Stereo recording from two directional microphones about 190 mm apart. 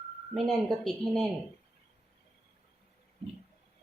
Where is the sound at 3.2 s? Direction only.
30° right (ahead or behind).